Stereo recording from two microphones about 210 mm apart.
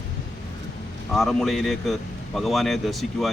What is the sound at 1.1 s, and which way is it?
A man's voice, centre (ahead or behind).